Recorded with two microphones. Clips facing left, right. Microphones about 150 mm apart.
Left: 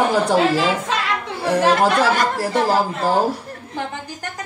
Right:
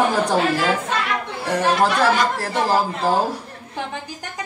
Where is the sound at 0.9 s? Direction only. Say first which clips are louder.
Left 1 dB; 90° left.